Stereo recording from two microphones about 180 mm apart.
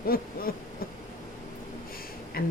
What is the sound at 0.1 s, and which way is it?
Speech, 55° left (ahead or behind).